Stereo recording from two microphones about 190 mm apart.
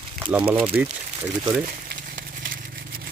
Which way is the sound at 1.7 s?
55° right (ahead or behind).